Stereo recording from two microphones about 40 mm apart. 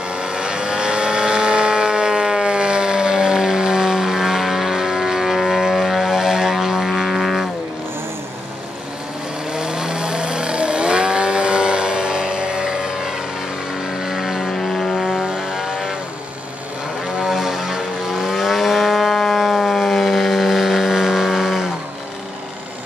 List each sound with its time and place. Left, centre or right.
0.1 s vehicle: right
7.1 s music: centre
9.5 s vehicle: centre
14.5 s vehicle: centre
17.2 s vehicle: centre
19.1 s civil defense siren: centre